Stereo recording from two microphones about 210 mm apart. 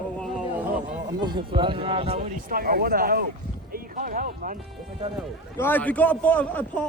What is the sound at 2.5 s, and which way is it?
Speech, 45° right (ahead or behind).